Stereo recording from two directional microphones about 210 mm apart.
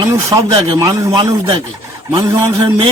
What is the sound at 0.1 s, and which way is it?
A man's voice, 15° right (ahead or behind).